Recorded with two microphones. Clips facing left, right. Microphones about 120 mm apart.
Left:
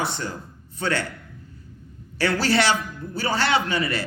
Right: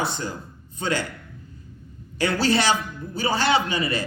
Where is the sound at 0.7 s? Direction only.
15° right (ahead or behind).